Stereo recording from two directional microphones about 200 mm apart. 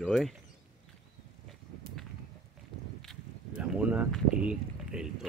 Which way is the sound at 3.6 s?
5° right (ahead or behind).